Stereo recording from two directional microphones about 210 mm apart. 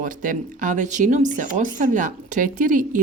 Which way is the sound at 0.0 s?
40° right (ahead or behind).